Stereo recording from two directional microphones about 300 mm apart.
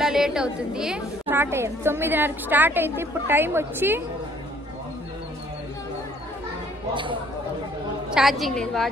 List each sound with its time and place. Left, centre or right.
0.0 s a woman's voice: centre
6.9 s speech: centre
8.1 s a woman's voice: centre